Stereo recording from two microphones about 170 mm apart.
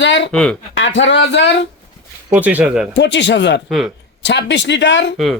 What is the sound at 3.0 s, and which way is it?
Speech, 90° left.